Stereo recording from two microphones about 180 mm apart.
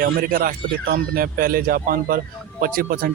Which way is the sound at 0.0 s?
55° right (ahead or behind).